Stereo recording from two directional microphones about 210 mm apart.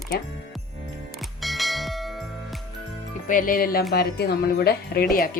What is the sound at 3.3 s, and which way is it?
Speech, 40° left (ahead or behind).